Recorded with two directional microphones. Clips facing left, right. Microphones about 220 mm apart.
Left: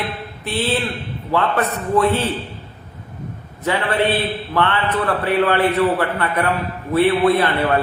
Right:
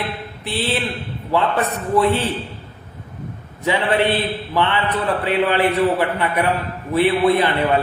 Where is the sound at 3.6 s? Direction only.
15° right (ahead or behind).